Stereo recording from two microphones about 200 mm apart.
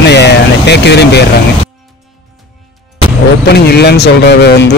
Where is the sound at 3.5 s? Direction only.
55° left (ahead or behind).